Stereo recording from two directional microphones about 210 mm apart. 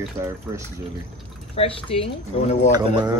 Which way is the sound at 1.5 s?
25° left (ahead or behind).